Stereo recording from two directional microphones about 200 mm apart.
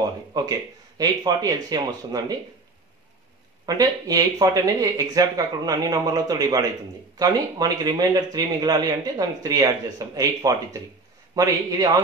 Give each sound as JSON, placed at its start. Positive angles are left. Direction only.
{"t": 0.3, "sound": "a man's voice", "side_deg": -20}
{"t": 3.6, "sound": "a man's voice", "side_deg": -20}